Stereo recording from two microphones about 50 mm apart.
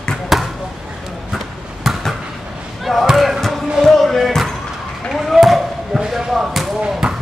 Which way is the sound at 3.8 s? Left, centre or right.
Centre.